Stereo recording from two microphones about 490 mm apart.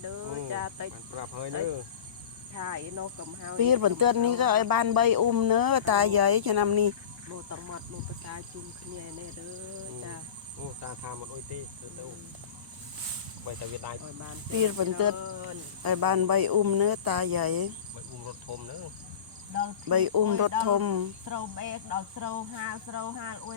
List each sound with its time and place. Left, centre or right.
0.0 s cricket: right
2.6 s speech: right
13.4 s speech: right
19.5 s speech: right